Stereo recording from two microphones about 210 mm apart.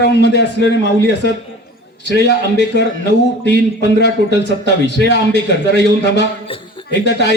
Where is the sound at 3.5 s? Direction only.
55° left (ahead or behind).